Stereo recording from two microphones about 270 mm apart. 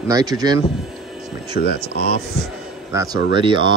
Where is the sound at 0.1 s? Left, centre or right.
Centre.